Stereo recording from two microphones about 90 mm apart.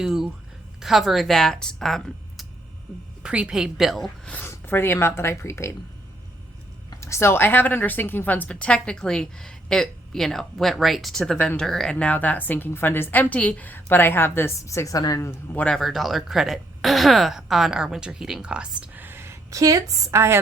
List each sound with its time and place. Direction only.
0.0 s speech: 5° right (ahead or behind)
3.2 s a woman's voice: 10° right (ahead or behind)
4.4 s speech: 25° left (ahead or behind)
7.0 s a woman's voice: 30° left (ahead or behind)
15.6 s speech: 5° left (ahead or behind)
18.8 s a woman's voice: 20° right (ahead or behind)